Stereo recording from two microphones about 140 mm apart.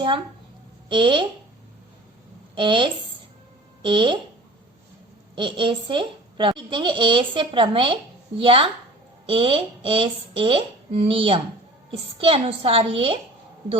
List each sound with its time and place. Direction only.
0.9 s a woman's voice: 35° right (ahead or behind)
2.6 s a woman's voice: 35° right (ahead or behind)
5.3 s a woman's voice: 35° right (ahead or behind)